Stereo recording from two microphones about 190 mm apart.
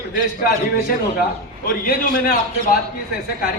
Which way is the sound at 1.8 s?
50° left (ahead or behind).